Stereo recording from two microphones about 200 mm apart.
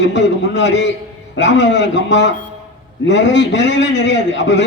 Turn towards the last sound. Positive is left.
turn(degrees=60)  # may be behind; listen again after turning